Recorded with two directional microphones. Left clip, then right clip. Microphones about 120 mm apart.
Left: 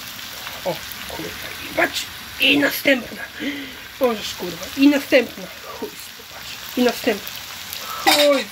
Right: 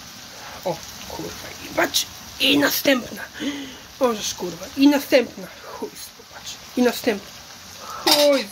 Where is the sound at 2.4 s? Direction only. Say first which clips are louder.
Left 2 dB; 20° right (ahead or behind).